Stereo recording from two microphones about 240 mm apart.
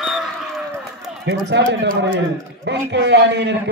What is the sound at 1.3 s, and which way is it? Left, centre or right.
A man's voice, right.